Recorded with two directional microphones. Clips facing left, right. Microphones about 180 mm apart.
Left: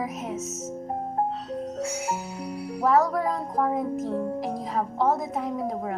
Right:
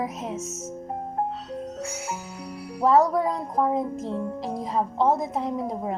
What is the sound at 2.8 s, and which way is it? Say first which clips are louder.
Speech: right 3 dB; 20° right (ahead or behind).